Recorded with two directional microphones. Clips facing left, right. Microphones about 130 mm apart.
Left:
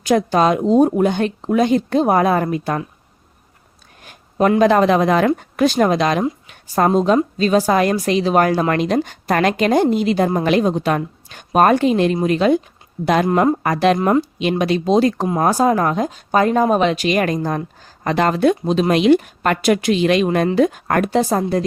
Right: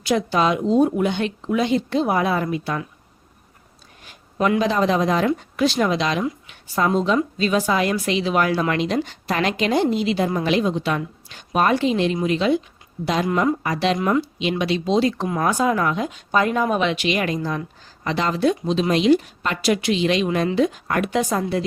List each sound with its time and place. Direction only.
0.0 s speech: 45° left (ahead or behind)
4.0 s a woman's voice: 50° left (ahead or behind)
15.3 s speech: 35° left (ahead or behind); by 21.1 s 50° left (ahead or behind)
21.1 s a woman's voice: 35° left (ahead or behind)